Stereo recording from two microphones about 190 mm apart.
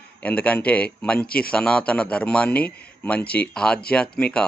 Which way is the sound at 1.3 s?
50° left (ahead or behind).